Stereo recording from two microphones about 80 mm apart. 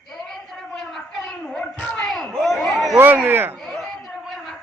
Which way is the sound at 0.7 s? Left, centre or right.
Centre.